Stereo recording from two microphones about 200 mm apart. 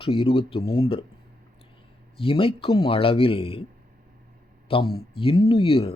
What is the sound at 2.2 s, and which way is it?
Speech, 25° left (ahead or behind).